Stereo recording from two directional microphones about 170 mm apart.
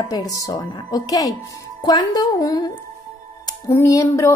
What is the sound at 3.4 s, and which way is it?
Music, 20° left (ahead or behind).